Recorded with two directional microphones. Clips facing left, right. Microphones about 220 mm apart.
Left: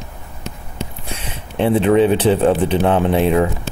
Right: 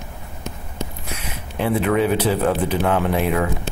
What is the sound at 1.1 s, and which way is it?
Speech, 30° left (ahead or behind).